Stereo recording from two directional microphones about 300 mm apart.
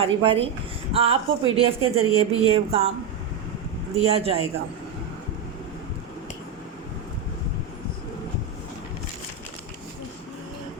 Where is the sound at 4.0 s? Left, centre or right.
Centre.